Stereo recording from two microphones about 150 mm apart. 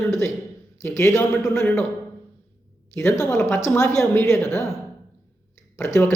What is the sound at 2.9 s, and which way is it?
A man's voice, 20° left (ahead or behind).